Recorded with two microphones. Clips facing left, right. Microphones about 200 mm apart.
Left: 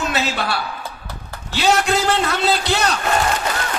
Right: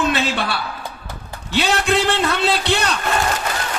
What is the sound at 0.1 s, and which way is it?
Speech, 30° right (ahead or behind).